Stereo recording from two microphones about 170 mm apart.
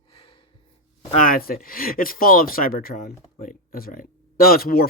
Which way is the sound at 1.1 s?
55° left (ahead or behind).